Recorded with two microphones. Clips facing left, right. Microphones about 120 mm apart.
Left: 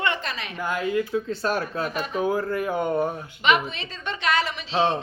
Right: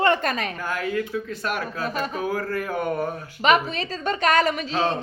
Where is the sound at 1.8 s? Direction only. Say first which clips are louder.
Right 1 dB; 40° right (ahead or behind).